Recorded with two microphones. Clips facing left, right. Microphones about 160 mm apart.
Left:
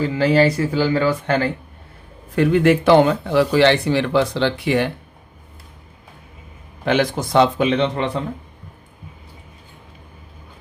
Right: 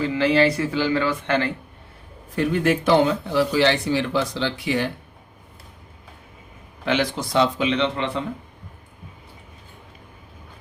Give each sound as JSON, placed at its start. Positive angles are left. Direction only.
{"t": 0.0, "sound": "speech", "side_deg": 40}
{"t": 2.3, "sound": "speech", "side_deg": 70}
{"t": 6.8, "sound": "speech", "side_deg": 50}